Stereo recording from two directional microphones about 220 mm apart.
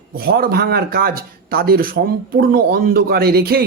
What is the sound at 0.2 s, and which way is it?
Speech, 45° right (ahead or behind).